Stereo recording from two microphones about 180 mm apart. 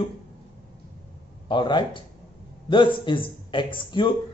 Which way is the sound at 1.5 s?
25° left (ahead or behind).